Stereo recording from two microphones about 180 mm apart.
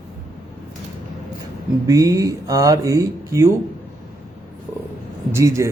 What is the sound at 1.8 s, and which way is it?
A man's voice, 20° right (ahead or behind).